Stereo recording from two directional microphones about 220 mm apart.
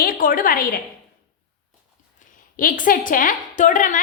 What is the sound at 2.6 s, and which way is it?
A woman's voice, 40° left (ahead or behind).